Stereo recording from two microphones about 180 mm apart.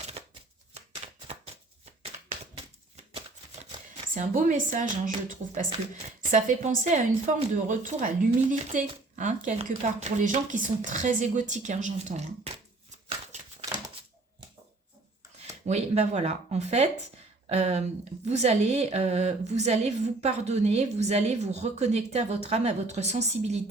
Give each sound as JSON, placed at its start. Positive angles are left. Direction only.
{"t": 0.2, "sound": "shuffling cards", "side_deg": -35}
{"t": 2.9, "sound": "a sound", "side_deg": -35}
{"t": 3.7, "sound": "a sound", "side_deg": -25}
{"t": 4.1, "sound": "a woman's voice", "side_deg": -45}
{"t": 6.3, "sound": "a woman's voice", "side_deg": -45}
{"t": 13.1, "sound": "shuffling cards", "side_deg": -35}
{"t": 15.6, "sound": "a woman's voice", "side_deg": -40}